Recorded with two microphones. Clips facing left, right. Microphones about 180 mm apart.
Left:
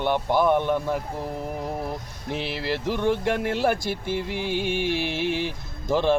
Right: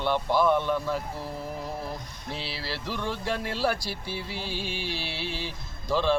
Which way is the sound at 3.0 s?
60° left (ahead or behind).